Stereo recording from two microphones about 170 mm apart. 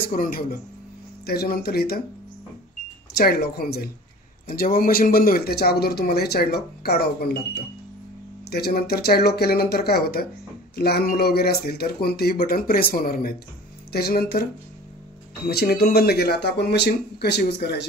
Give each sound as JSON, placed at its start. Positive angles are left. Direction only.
{"t": 0.1, "sound": "speech", "side_deg": 55}
{"t": 3.2, "sound": "speech", "side_deg": 65}